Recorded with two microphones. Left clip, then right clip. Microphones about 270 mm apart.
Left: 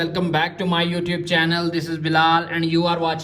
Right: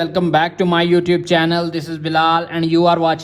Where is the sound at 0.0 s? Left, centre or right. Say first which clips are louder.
Right 6 dB; right.